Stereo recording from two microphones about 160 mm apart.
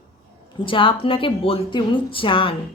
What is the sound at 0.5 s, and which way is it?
A woman's voice, 35° left (ahead or behind).